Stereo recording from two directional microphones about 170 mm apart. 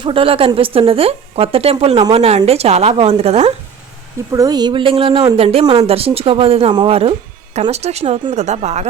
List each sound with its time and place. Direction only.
0.0 s speech: 30° right (ahead or behind)
4.3 s a woman's voice: 20° right (ahead or behind); by 8.9 s 40° right (ahead or behind)